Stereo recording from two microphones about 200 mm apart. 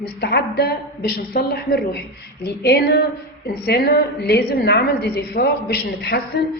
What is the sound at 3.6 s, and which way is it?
A woman's voice, 55° left (ahead or behind).